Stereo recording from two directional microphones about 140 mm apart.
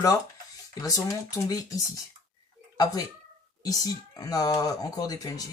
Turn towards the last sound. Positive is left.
turn(degrees=25)  # may be behind; listen again after turning